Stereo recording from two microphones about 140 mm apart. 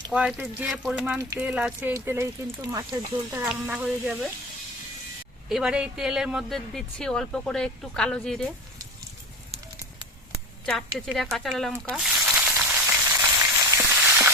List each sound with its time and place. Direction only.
0.1 s speech: 10° right (ahead or behind)
3.8 s speech: centre (ahead or behind)
5.5 s speech: 5° right (ahead or behind)
10.7 s speech: centre (ahead or behind)
11.9 s frying: 5° right (ahead or behind)